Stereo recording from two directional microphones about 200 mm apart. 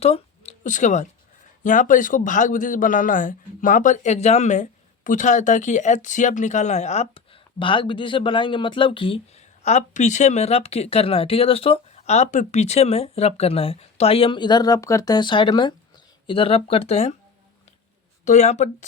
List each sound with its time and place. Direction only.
0.0 s a man's voice: 30° left (ahead or behind)
18.3 s a man's voice: 35° left (ahead or behind)